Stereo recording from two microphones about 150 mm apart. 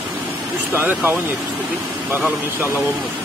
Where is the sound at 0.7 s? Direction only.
15° right (ahead or behind).